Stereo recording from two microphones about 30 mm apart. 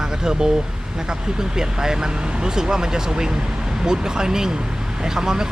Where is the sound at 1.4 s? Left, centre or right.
Right.